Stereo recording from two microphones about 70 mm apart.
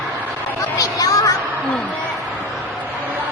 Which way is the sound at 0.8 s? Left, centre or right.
Left.